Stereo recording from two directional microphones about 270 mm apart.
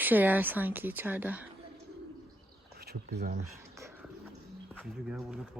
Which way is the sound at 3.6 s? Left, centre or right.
Centre.